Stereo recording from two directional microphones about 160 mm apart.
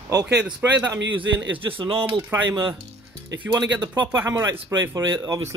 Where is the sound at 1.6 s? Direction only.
30° right (ahead or behind).